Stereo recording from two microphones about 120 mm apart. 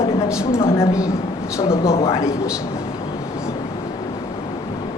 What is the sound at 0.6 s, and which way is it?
A man's voice, 25° left (ahead or behind).